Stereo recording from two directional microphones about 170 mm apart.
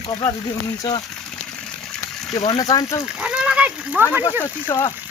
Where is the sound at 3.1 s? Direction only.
5° right (ahead or behind).